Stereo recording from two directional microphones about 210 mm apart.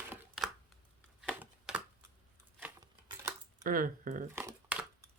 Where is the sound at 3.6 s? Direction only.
40° right (ahead or behind).